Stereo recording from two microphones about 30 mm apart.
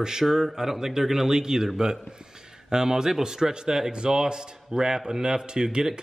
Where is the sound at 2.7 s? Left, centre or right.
Centre.